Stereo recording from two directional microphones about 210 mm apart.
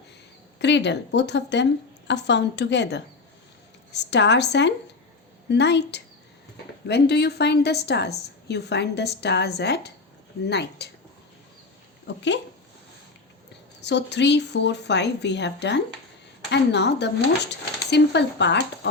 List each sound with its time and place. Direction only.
0.6 s a woman's voice: 55° left (ahead or behind)
12.0 s speech: 55° left (ahead or behind)
13.8 s speech: 55° left (ahead or behind)